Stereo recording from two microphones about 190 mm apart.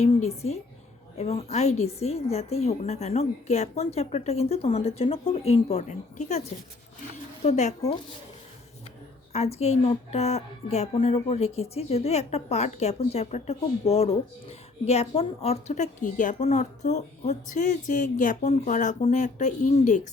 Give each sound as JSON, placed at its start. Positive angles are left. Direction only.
{"t": 0.3, "sound": "a woman's voice", "side_deg": 35}
{"t": 7.4, "sound": "a woman's voice", "side_deg": 35}
{"t": 9.3, "sound": "a woman's voice", "side_deg": 35}